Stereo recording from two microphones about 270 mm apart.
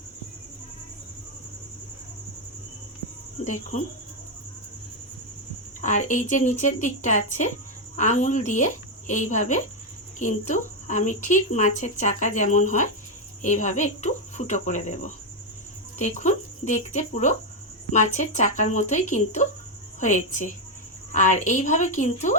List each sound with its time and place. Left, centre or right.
3.4 s speech: left
5.8 s speech: left